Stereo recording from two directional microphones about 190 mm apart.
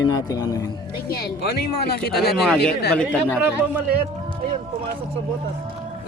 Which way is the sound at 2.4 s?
5° left (ahead or behind).